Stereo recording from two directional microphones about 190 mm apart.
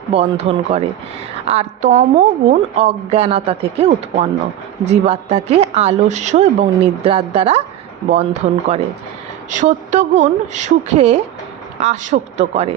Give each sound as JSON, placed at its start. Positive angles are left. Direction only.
{"t": 0.1, "sound": "speech", "side_deg": -30}